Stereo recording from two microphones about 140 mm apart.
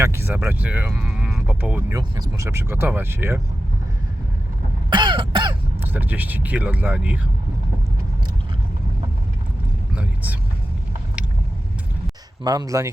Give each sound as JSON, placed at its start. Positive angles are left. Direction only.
{"t": 0.0, "sound": "speech", "side_deg": -15}
{"t": 1.9, "sound": "speech", "side_deg": -30}
{"t": 4.9, "sound": "throat clearing", "side_deg": -35}
{"t": 5.8, "sound": "speech", "side_deg": -10}
{"t": 9.9, "sound": "speech", "side_deg": -10}
{"t": 12.5, "sound": "speech", "side_deg": -25}